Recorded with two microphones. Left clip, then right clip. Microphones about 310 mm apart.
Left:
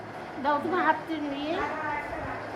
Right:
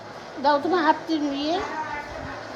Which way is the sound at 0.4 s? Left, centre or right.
Right.